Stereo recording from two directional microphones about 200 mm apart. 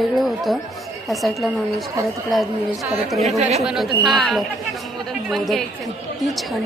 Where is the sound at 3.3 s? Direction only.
35° right (ahead or behind).